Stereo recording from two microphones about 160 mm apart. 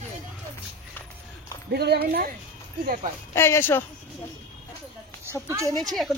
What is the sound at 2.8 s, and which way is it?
Speech, 60° right (ahead or behind).